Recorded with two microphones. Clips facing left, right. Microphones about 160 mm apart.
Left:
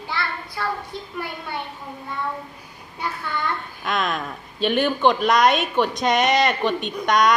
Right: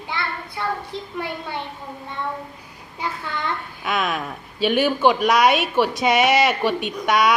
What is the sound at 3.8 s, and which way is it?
Speech, 5° right (ahead or behind).